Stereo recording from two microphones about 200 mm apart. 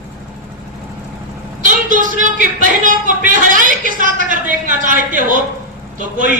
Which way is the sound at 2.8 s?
40° right (ahead or behind).